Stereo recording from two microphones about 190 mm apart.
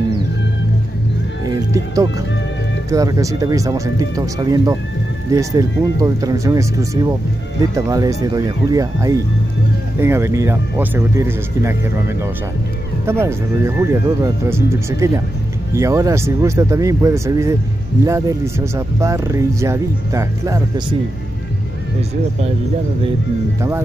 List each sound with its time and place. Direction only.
1.5 s music: 15° right (ahead or behind)
2.9 s speech: 15° right (ahead or behind)